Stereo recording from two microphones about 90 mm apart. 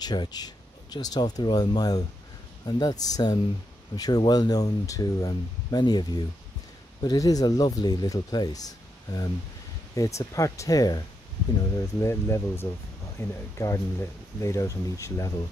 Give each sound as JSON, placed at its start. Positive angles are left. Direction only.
{"t": 0.0, "sound": "speech", "side_deg": 50}
{"t": 11.7, "sound": "speech", "side_deg": 35}